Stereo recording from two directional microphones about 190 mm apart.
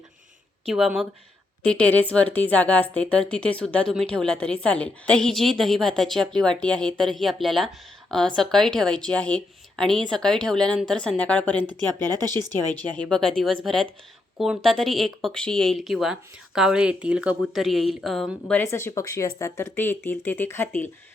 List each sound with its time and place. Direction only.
0.6 s speech: centre (ahead or behind)
12.1 s speech: 20° right (ahead or behind)
12.7 s speech: 5° left (ahead or behind)